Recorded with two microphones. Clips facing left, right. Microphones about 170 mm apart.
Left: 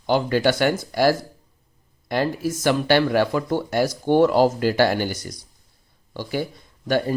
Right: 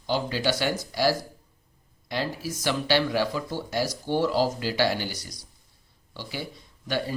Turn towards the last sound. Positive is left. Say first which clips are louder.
# left 7 dB
turn(degrees=50)  # may be behind; listen again after turning